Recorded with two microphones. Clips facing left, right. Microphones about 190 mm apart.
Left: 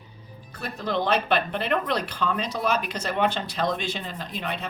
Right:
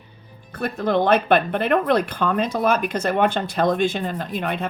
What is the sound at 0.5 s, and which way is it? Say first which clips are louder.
Speech: right 7 dB; 55° right (ahead or behind).